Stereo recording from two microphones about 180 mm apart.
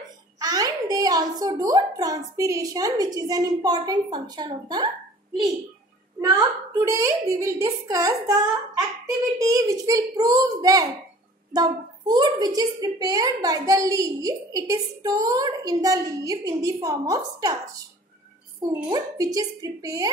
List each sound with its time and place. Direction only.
0.4 s a child's voice: 20° right (ahead or behind)
6.9 s a child's voice: 20° right (ahead or behind)
18.9 s a child's voice: 20° right (ahead or behind)